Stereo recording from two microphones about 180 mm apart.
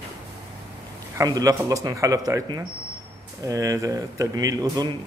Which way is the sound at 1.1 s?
20° right (ahead or behind).